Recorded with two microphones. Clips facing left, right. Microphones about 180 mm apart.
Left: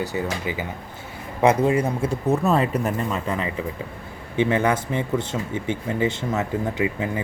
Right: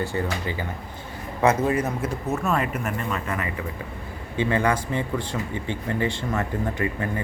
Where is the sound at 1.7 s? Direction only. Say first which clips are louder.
Left 3 dB; 30° left (ahead or behind).